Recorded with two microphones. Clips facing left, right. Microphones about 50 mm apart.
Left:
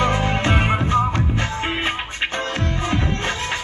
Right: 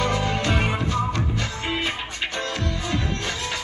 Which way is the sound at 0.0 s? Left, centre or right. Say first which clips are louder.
Left 4 dB; left.